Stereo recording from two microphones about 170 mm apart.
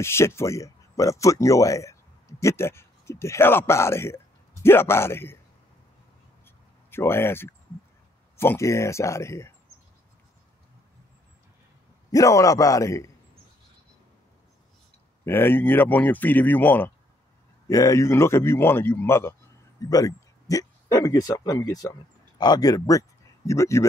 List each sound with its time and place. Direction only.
0.0 s speech: 15° left (ahead or behind)
6.4 s a sound: 15° left (ahead or behind)
8.4 s speech: 15° left (ahead or behind)
12.1 s a man's voice: 20° left (ahead or behind)
15.2 s speech: 15° left (ahead or behind)